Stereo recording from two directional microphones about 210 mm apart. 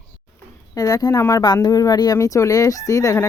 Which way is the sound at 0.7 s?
20° left (ahead or behind).